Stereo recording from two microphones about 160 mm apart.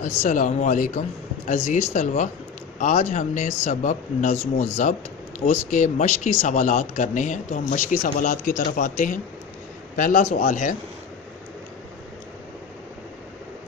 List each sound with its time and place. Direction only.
0.0 s speech: 55° left (ahead or behind)